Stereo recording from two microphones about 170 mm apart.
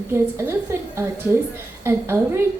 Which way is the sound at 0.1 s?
15° right (ahead or behind).